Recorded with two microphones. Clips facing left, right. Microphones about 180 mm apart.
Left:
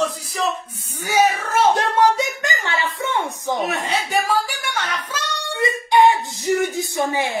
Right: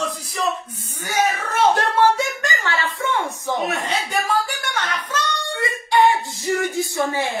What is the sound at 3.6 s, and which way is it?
Speech, 5° left (ahead or behind).